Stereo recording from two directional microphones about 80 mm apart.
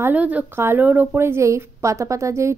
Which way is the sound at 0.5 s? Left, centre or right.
Right.